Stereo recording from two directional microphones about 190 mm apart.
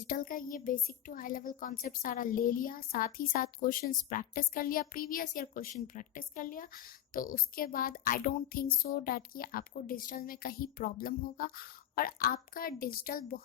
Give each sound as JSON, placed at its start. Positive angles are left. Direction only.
{"t": 0.1, "sound": "a woman's voice", "side_deg": 50}